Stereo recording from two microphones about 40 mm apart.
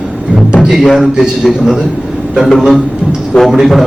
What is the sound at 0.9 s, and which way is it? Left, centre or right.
Speech, centre.